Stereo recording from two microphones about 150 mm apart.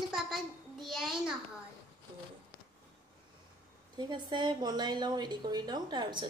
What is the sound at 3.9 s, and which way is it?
A woman's voice, 30° right (ahead or behind).